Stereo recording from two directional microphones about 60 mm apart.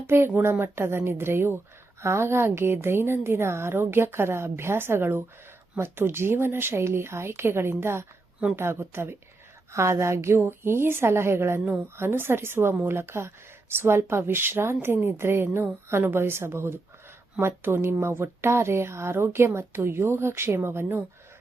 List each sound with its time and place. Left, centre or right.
0.1 s a woman's voice: right
2.0 s a woman's voice: right